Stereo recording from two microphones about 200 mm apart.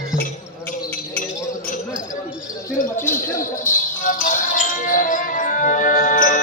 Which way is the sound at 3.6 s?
40° left (ahead or behind).